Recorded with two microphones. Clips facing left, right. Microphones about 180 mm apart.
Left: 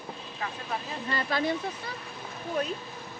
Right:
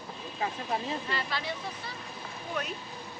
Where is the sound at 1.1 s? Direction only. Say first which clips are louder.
Left 6 dB; 50° left (ahead or behind).